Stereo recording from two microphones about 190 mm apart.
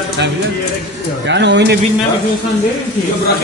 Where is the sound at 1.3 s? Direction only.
65° right (ahead or behind).